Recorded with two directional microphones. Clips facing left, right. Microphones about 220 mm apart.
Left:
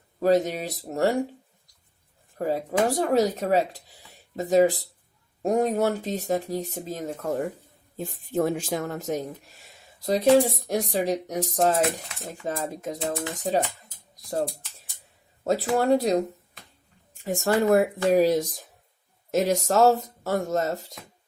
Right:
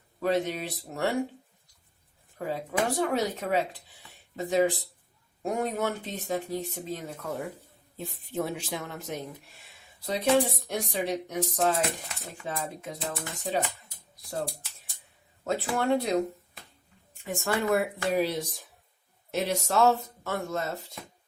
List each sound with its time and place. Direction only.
0.2 s speech: 40° left (ahead or behind)
2.4 s speech: 40° left (ahead or behind)
15.4 s speech: 40° left (ahead or behind)